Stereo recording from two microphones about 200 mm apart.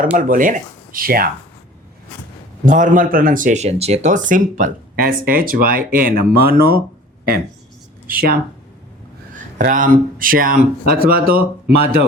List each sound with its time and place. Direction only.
0.2 s speech: 40° right (ahead or behind)
2.6 s speech: 40° right (ahead or behind)
8.0 s speech: 45° right (ahead or behind)
9.6 s speech: 40° right (ahead or behind)